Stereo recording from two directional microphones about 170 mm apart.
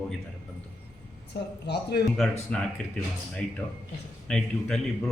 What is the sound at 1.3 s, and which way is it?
Speech, 75° left (ahead or behind).